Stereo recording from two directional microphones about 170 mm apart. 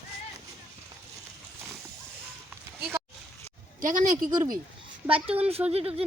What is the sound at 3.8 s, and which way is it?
Speech, 50° right (ahead or behind).